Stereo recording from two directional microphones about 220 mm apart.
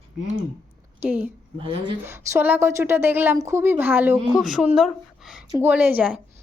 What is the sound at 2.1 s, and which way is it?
A woman's voice, 10° right (ahead or behind).